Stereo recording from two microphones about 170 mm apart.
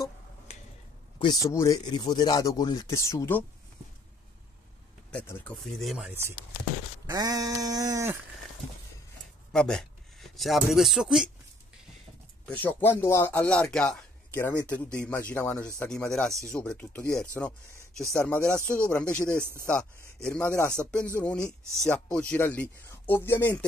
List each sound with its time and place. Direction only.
1.2 s speech: 20° left (ahead or behind)
5.1 s speech: 10° left (ahead or behind)
6.0 s speech: 15° right (ahead or behind)
7.1 s a sound: 20° right (ahead or behind)
9.5 s speech: 5° left (ahead or behind)
12.4 s speech: 10° left (ahead or behind)
19.2 s speech: 15° right (ahead or behind)
20.2 s speech: 10° left (ahead or behind)